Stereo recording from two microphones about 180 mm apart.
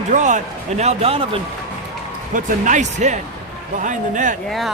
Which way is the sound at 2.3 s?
45° right (ahead or behind).